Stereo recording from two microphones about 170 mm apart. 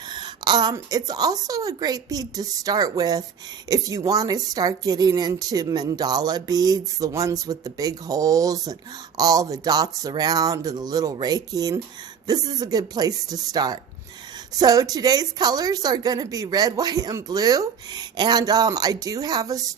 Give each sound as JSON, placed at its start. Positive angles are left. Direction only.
{"t": 0.1, "sound": "a woman's voice", "side_deg": -25}